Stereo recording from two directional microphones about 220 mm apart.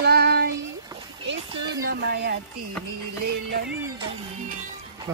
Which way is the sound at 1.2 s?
55° right (ahead or behind).